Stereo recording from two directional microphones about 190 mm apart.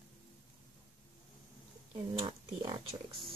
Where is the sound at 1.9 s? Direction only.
25° right (ahead or behind).